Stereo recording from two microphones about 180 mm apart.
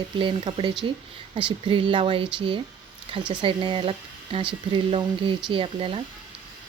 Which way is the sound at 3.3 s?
25° right (ahead or behind).